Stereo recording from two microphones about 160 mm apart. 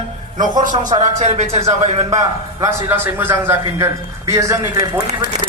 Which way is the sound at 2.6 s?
15° right (ahead or behind).